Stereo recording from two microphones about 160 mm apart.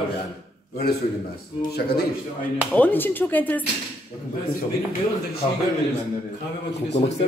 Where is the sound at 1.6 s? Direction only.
90° left.